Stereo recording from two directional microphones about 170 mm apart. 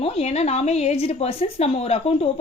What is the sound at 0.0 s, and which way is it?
Speech, 40° left (ahead or behind).